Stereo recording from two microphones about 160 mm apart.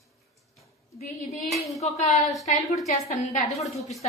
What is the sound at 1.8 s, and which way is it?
A woman's voice, 45° left (ahead or behind).